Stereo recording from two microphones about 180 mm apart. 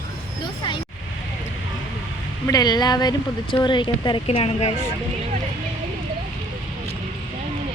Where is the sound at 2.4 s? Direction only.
20° left (ahead or behind).